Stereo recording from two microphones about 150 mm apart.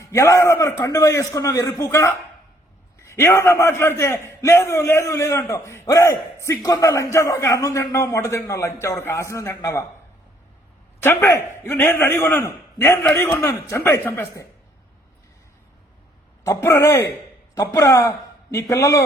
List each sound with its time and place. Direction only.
0.0 s a man's voice: 20° left (ahead or behind)
11.0 s a man's voice: 15° left (ahead or behind)
16.5 s a man's voice: 15° left (ahead or behind)